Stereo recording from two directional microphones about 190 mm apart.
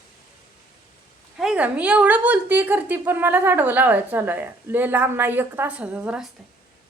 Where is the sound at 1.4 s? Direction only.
5° right (ahead or behind).